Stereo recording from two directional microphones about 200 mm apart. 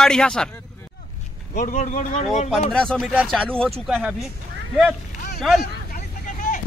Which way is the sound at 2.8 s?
5° left (ahead or behind).